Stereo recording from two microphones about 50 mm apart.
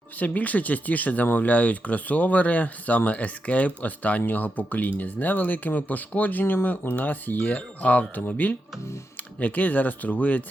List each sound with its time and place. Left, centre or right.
0.2 s speech: left
9.4 s speech: left